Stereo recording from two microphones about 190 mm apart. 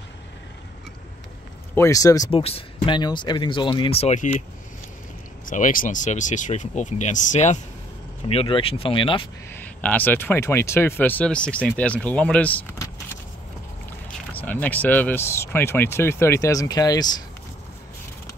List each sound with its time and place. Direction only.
1.8 s speech: 15° left (ahead or behind)
2.3 s speech: 30° left (ahead or behind)
5.4 s speech: 45° left (ahead or behind); by 9.2 s 25° left (ahead or behind)
9.5 s speech: 10° left (ahead or behind)
14.3 s speech: 10° left (ahead or behind)